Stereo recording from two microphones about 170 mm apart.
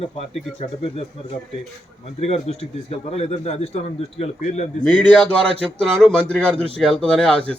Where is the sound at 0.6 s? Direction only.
35° left (ahead or behind).